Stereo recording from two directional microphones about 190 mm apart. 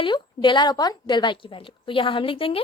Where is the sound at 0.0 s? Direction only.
25° left (ahead or behind).